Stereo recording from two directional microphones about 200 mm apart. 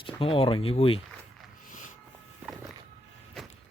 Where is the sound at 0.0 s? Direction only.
25° left (ahead or behind).